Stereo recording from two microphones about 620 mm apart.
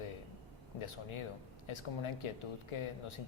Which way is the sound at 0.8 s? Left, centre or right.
Left.